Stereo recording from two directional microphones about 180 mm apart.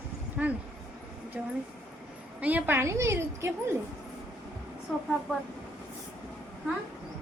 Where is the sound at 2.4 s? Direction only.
10° right (ahead or behind).